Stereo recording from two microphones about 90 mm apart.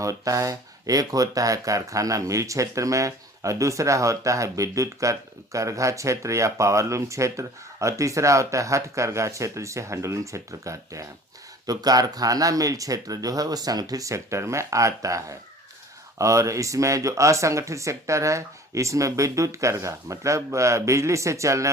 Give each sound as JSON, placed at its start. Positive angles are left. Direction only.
{"t": 0.0, "sound": "speech", "side_deg": -40}